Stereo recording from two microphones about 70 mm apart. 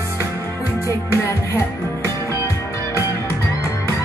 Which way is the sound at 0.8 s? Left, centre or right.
Left.